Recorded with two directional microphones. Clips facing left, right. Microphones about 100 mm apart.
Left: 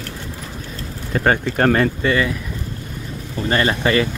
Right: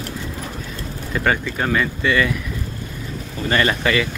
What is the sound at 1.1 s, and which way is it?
Speech, 40° left (ahead or behind).